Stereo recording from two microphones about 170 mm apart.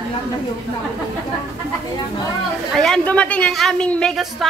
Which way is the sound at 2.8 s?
5° left (ahead or behind).